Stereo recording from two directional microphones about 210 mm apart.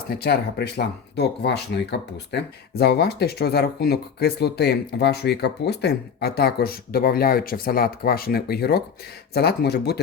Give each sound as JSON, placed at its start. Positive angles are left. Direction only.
{"t": 0.1, "sound": "speech", "side_deg": 50}